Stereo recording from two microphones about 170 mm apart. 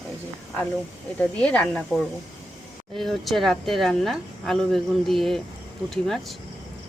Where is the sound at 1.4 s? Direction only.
5° left (ahead or behind).